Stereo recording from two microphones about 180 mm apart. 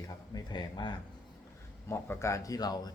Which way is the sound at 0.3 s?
25° left (ahead or behind).